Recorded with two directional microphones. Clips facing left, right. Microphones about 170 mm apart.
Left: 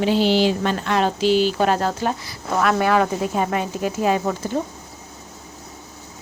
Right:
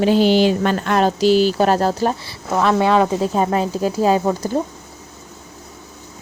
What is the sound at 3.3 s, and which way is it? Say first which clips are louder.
Speech: right 4 dB; 35° right (ahead or behind).